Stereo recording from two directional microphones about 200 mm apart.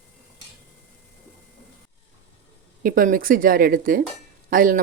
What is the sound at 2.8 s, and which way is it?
Speech, 45° right (ahead or behind).